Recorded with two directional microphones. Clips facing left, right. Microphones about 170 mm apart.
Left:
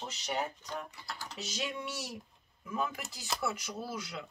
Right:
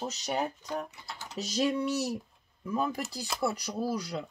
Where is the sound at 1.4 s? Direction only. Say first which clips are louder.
Right 11 dB; 40° right (ahead or behind).